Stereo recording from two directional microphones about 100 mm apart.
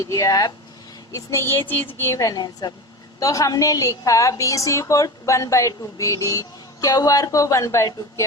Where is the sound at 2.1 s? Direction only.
40° left (ahead or behind).